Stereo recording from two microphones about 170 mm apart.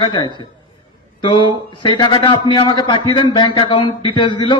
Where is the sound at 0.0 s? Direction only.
25° left (ahead or behind).